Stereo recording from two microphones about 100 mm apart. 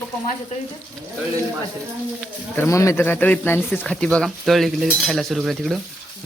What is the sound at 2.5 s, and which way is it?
Speech, 25° left (ahead or behind).